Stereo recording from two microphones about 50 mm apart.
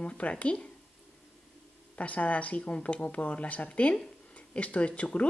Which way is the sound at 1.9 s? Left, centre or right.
Left.